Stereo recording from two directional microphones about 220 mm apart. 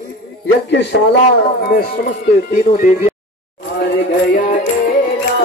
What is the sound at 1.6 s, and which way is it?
Speech, 40° left (ahead or behind).